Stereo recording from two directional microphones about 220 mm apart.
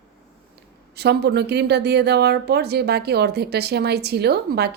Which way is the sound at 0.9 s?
50° right (ahead or behind).